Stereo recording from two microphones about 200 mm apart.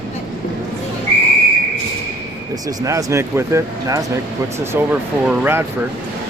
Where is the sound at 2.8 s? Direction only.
15° right (ahead or behind).